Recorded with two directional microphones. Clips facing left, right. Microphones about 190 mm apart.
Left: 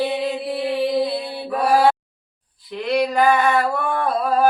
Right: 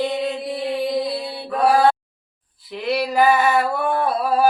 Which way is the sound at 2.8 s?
5° right (ahead or behind).